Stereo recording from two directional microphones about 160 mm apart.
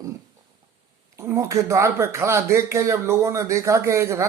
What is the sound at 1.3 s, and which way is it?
Speech, 20° right (ahead or behind).